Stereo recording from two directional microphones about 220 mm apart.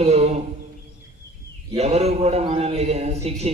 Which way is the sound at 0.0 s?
30° right (ahead or behind).